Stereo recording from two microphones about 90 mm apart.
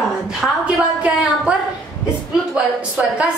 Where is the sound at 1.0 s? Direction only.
15° right (ahead or behind).